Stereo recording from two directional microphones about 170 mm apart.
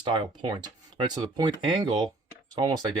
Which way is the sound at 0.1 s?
25° right (ahead or behind).